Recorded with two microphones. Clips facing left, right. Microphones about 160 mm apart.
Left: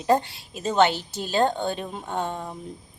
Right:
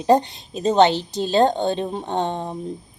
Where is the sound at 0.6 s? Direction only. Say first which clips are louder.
Right 5 dB; 35° right (ahead or behind).